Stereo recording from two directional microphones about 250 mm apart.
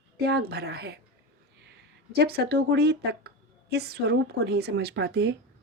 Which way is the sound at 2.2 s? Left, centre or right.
Right.